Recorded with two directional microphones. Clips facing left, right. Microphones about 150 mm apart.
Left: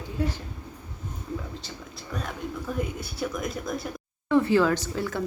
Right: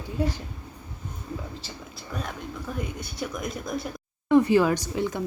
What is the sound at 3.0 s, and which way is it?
Speech, centre (ahead or behind).